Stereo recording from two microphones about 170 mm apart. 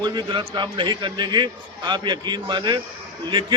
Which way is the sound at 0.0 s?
25° right (ahead or behind).